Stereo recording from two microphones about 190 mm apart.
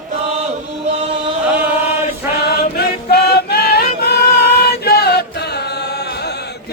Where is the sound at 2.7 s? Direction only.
60° left (ahead or behind).